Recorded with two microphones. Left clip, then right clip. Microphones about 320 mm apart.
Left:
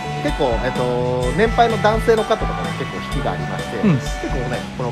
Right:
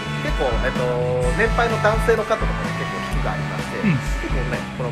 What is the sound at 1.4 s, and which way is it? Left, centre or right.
Speech, left.